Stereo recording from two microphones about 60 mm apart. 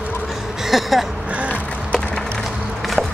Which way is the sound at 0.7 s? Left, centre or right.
Centre.